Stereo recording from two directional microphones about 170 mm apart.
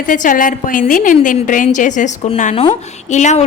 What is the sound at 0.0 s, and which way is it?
A woman's voice, 50° left (ahead or behind).